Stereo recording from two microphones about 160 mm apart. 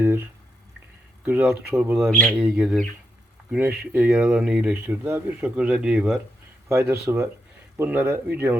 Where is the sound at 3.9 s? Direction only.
10° right (ahead or behind).